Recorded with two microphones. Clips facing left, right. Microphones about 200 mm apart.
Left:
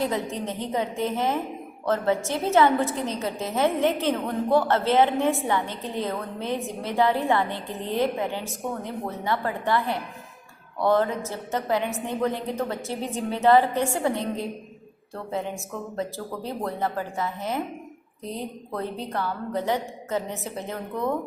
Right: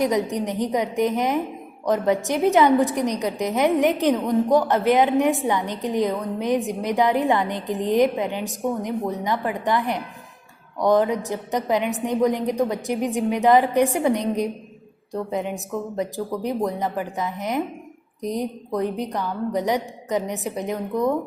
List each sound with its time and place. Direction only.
0.0 s a woman's voice: 15° right (ahead or behind)